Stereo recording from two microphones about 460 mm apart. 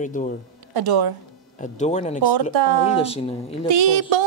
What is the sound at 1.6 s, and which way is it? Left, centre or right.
Speech, centre.